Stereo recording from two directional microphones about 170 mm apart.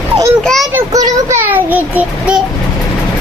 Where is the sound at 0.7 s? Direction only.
15° right (ahead or behind).